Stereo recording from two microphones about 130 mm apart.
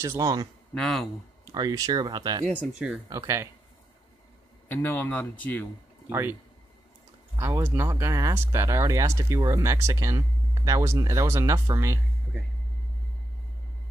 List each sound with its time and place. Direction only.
0.0 s speech: 25° right (ahead or behind)
0.7 s speech: 5° left (ahead or behind)
1.4 s speech: 30° right (ahead or behind)
4.6 s speech: 15° left (ahead or behind)
6.0 s speech: 20° right (ahead or behind)
7.3 s speech: 20° right (ahead or behind)